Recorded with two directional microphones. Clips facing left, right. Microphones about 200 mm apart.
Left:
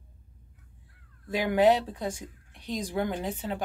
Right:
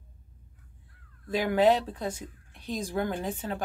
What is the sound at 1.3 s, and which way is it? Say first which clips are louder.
Speech: left 1 dB; 15° left (ahead or behind).